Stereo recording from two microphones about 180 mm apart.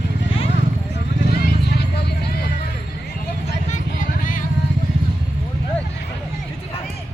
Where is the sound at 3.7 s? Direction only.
45° left (ahead or behind).